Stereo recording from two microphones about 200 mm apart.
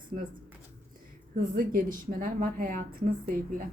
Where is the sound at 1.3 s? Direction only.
45° right (ahead or behind).